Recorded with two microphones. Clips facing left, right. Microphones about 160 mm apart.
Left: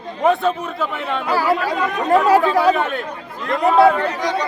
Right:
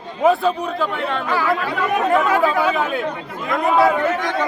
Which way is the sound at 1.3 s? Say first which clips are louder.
Left 4 dB; 35° left (ahead or behind).